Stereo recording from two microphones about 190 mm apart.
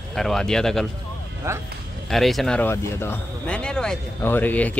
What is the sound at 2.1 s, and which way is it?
Speech, centre (ahead or behind).